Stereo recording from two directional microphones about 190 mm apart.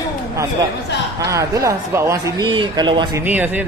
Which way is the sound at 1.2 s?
15° right (ahead or behind).